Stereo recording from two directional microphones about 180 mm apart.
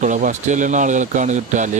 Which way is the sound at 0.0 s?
45° right (ahead or behind).